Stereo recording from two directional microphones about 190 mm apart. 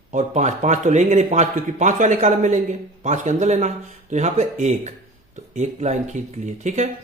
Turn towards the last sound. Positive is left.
turn(degrees=-40)  # may be behind; listen again after turning